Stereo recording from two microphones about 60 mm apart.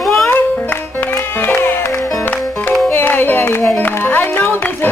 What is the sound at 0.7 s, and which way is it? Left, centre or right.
Music, left.